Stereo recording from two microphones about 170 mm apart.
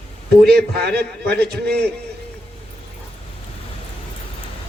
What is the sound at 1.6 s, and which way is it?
Speech, 75° right (ahead or behind).